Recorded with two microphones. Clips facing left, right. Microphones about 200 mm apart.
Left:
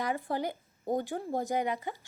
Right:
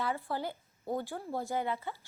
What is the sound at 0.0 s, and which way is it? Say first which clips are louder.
A woman's voice: left 3 dB; 15° left (ahead or behind).